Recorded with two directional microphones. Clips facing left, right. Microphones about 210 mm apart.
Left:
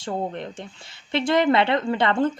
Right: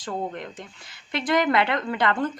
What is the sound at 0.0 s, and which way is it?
Speech, 25° left (ahead or behind).